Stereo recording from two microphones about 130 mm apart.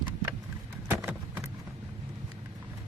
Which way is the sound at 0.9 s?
15° right (ahead or behind).